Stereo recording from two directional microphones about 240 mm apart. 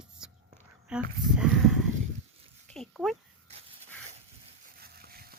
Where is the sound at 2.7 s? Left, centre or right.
Centre.